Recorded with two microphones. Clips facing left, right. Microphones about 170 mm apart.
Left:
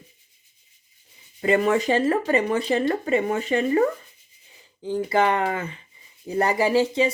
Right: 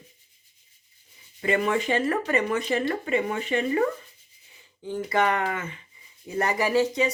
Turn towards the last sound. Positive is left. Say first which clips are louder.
# left 3 dB
turn(degrees=30)  # may be behind; listen again after turning